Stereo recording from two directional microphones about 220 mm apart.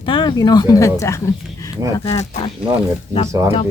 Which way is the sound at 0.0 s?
20° left (ahead or behind).